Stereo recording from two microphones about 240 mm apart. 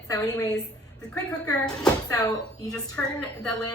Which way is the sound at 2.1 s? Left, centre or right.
Centre.